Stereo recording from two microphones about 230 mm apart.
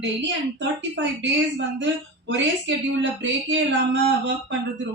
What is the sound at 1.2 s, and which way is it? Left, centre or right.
A woman's voice, right.